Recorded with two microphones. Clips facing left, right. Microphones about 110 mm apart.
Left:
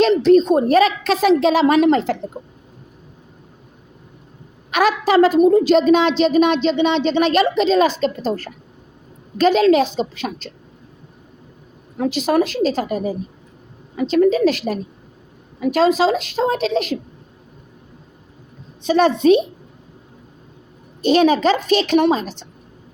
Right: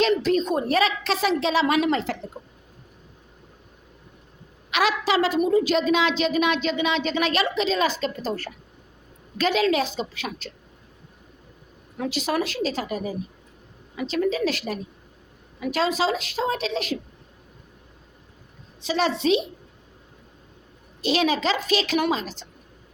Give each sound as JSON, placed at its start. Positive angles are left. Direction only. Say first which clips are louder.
{"t": 0.1, "sound": "a woman's voice", "louder": "left 9 dB", "side_deg": 35}
{"t": 4.7, "sound": "a woman's voice", "louder": "left 7 dB", "side_deg": 45}
{"t": 11.9, "sound": "a woman's voice", "louder": "left 8 dB", "side_deg": 40}
{"t": 15.6, "sound": "a woman's voice", "louder": "left 8 dB", "side_deg": 40}
{"t": 18.9, "sound": "a woman's voice", "louder": "left 8 dB", "side_deg": 45}
{"t": 21.0, "sound": "a woman's voice", "louder": "left 8 dB", "side_deg": 45}